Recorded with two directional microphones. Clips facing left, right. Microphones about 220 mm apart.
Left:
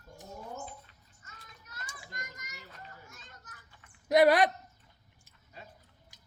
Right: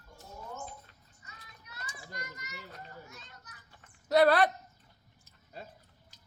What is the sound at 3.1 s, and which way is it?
Children playing, 45° left (ahead or behind).